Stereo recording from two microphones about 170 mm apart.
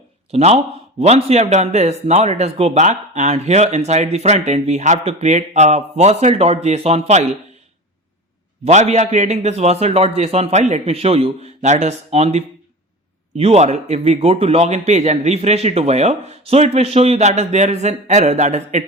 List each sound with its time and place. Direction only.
0.3 s speech: 40° right (ahead or behind)
8.6 s speech: 40° right (ahead or behind)